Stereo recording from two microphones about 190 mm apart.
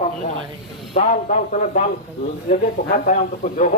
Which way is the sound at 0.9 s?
40° left (ahead or behind).